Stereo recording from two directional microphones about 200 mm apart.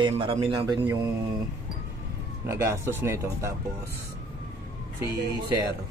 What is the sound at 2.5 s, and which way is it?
Speech, 15° right (ahead or behind).